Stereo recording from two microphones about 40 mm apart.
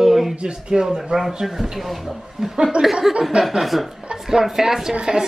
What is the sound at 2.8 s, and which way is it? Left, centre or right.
Speech, right.